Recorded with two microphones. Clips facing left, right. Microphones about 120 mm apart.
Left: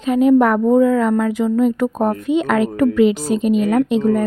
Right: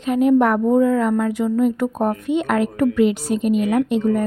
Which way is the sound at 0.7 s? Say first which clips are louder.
Left 3 dB; 90° left.